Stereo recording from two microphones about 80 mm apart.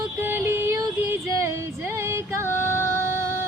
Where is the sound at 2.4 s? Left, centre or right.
Left.